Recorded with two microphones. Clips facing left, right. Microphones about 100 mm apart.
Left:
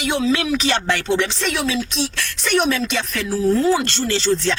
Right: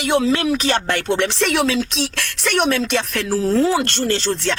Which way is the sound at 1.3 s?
80° right.